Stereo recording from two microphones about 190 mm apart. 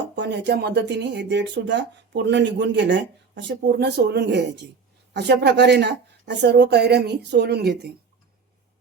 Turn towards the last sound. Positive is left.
turn(degrees=-60)  # may be behind; listen again after turning